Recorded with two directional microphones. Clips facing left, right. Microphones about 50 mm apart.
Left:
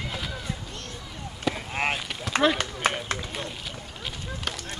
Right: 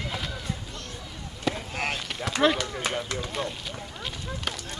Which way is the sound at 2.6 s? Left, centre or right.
Left.